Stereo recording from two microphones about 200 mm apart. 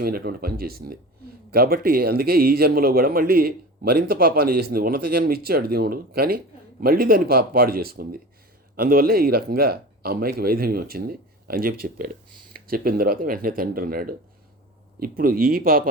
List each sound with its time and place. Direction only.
0.0 s speech: 50° right (ahead or behind)